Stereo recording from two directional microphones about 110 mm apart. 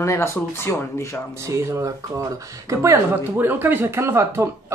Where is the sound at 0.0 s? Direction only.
25° left (ahead or behind).